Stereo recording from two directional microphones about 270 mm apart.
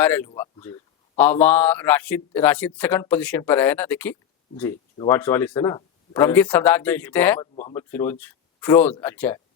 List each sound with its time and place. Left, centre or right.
0.0 s speech: centre
7.5 s speech: left
7.8 s speech: centre